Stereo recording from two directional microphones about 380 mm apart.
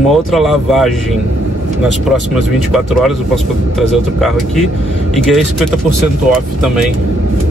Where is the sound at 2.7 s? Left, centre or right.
Centre.